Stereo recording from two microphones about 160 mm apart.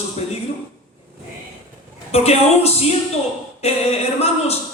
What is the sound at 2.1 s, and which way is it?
Speech, 40° left (ahead or behind).